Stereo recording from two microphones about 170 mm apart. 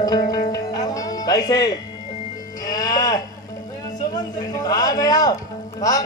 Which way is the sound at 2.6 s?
20° left (ahead or behind).